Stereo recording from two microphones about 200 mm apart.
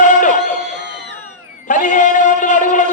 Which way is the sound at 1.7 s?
40° left (ahead or behind).